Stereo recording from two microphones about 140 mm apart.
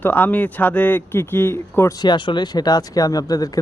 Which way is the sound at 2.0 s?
35° left (ahead or behind).